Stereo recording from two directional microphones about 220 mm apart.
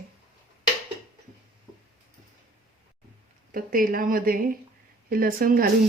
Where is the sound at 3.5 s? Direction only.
40° right (ahead or behind).